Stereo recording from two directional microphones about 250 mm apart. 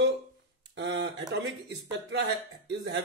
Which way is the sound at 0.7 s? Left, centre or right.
Right.